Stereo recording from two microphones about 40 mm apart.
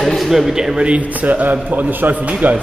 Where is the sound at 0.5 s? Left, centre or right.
Centre.